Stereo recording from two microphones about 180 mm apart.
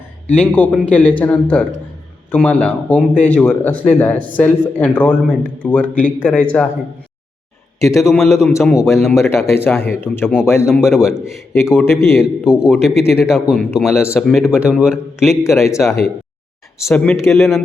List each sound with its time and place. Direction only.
0.3 s speech: 10° left (ahead or behind)
7.9 s a man's voice: centre (ahead or behind)
9.2 s speech: 15° left (ahead or behind)
10.7 s a man's voice: centre (ahead or behind)
11.5 s speech: 15° left (ahead or behind)
12.2 s a man's voice: 5° right (ahead or behind)
15.6 s speech: 15° left (ahead or behind)
16.9 s a man's voice: 5° left (ahead or behind)